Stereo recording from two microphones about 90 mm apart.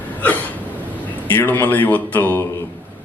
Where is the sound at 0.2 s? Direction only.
20° left (ahead or behind).